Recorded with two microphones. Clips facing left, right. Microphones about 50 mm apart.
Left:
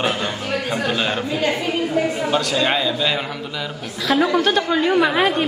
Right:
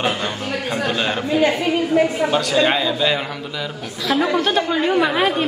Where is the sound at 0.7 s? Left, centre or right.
Centre.